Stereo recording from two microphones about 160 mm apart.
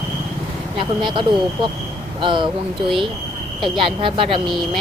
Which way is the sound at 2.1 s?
30° right (ahead or behind).